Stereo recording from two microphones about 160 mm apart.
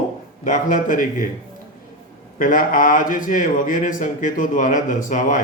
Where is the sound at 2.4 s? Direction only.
60° left (ahead or behind).